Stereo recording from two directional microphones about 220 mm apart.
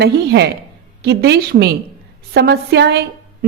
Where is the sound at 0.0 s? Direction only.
50° right (ahead or behind).